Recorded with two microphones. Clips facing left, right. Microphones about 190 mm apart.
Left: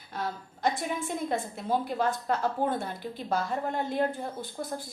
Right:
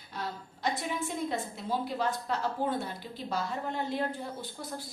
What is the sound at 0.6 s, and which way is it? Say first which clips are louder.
A woman's voice: left 3 dB; 50° left (ahead or behind).